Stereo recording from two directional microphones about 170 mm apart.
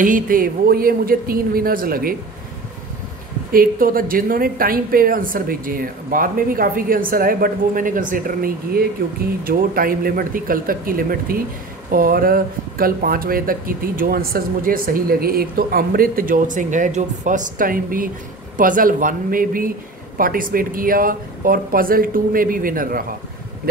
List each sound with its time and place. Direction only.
0.0 s speech: 55° right (ahead or behind)
3.5 s speech: 55° right (ahead or behind)